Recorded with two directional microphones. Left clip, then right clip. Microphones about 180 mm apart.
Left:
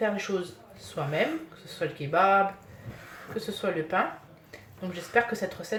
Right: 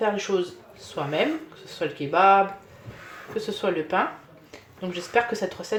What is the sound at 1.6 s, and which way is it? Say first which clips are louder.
Speech: right 5 dB; 15° right (ahead or behind).